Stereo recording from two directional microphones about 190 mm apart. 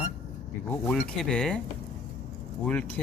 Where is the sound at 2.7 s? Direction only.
10° left (ahead or behind).